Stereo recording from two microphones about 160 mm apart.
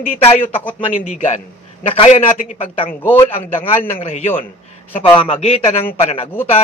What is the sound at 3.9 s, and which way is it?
Speech, 40° left (ahead or behind).